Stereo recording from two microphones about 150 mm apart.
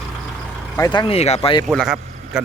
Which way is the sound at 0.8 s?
30° left (ahead or behind).